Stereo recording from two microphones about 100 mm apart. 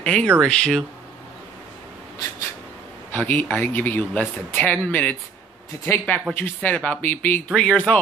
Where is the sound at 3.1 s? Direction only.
15° left (ahead or behind).